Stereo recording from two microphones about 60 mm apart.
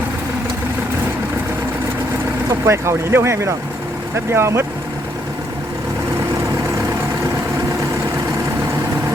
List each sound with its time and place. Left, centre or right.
2.5 s speech: right